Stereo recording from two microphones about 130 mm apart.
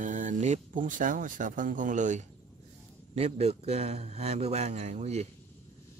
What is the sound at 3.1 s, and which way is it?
A man's voice, 55° right (ahead or behind).